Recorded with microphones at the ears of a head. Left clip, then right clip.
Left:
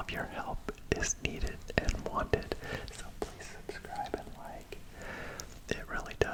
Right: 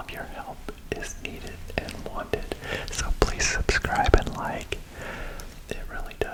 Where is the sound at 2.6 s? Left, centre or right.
Right.